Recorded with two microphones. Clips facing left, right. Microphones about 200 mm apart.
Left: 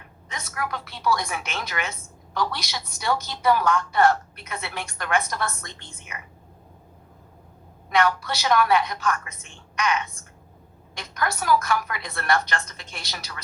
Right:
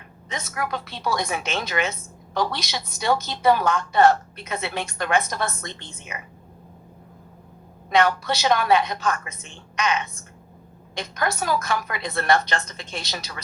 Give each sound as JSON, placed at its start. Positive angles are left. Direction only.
{"t": 0.3, "sound": "a woman's voice", "side_deg": -20}
{"t": 7.9, "sound": "a woman's voice", "side_deg": -20}